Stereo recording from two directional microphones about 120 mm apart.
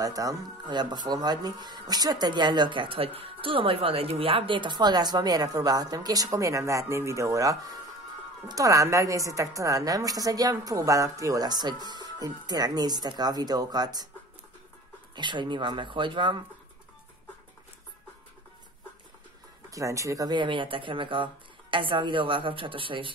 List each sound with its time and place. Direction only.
0.0 s speech: 30° right (ahead or behind)
15.1 s speech: 40° right (ahead or behind)
19.7 s speech: 25° right (ahead or behind); by 23.1 s 45° right (ahead or behind)